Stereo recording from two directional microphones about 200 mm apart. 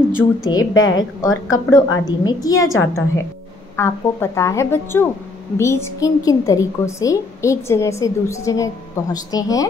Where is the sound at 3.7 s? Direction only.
15° left (ahead or behind).